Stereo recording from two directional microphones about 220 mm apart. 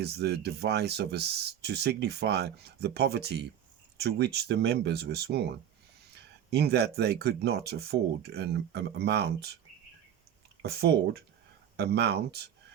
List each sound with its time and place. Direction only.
0.0 s speech: 45° right (ahead or behind)
10.6 s speech: 45° right (ahead or behind)